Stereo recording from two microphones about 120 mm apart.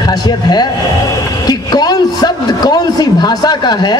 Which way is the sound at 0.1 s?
35° left (ahead or behind).